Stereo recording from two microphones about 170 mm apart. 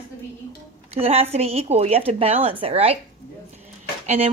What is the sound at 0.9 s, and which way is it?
A woman's voice, 35° right (ahead or behind).